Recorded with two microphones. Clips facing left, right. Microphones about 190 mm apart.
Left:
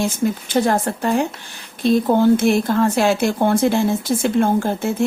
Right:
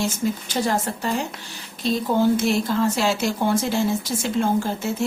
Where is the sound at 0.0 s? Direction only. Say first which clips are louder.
Left 4 dB; 55° left (ahead or behind).